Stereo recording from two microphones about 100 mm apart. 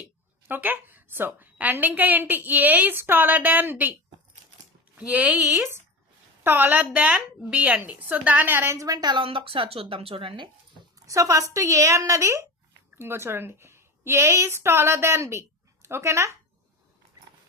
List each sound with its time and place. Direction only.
0.4 s a woman's voice: 20° right (ahead or behind)
4.9 s a woman's voice: 15° right (ahead or behind); by 9.2 s 45° right (ahead or behind)
9.2 s speech: 65° right (ahead or behind)
11.0 s a woman's voice: 35° right (ahead or behind)